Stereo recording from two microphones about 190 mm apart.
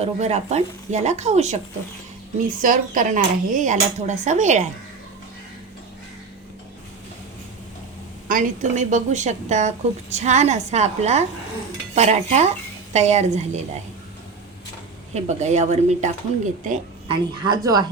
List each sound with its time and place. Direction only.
0.0 s a woman's voice: 35° right (ahead or behind)
2.6 s a woman's voice: 45° right (ahead or behind)
8.3 s a woman's voice: 40° right (ahead or behind)
15.1 s a woman's voice: 35° right (ahead or behind)
17.1 s a woman's voice: 20° right (ahead or behind)